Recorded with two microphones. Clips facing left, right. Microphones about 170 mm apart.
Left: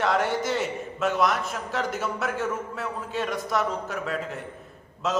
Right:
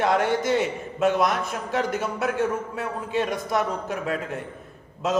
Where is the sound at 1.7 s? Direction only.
15° right (ahead or behind).